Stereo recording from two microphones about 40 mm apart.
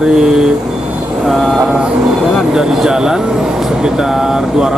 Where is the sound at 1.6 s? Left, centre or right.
Centre.